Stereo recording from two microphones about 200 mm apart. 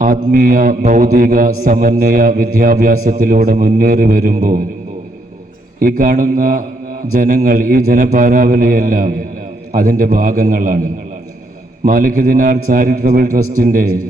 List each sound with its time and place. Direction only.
0.3 s mantra: 45° right (ahead or behind)
5.8 s mantra: 45° right (ahead or behind)